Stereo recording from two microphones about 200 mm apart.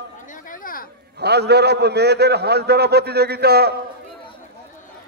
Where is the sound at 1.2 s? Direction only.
55° right (ahead or behind).